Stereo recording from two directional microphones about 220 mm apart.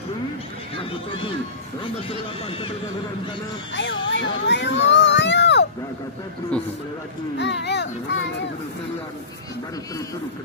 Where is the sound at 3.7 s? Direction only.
55° left (ahead or behind).